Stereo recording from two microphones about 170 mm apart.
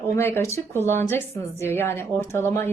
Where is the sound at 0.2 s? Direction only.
15° left (ahead or behind).